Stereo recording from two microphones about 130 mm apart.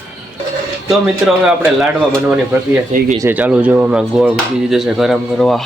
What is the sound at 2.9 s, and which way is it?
Speech, 65° right (ahead or behind).